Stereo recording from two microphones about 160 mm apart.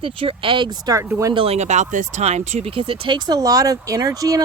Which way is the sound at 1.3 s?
35° right (ahead or behind).